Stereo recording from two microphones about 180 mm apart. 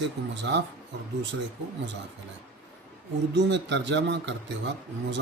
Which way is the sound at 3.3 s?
75° right (ahead or behind).